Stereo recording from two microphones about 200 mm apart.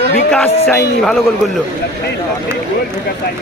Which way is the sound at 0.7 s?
Centre (ahead or behind).